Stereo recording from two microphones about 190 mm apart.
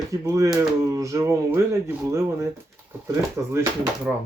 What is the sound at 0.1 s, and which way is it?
Speech, 15° right (ahead or behind).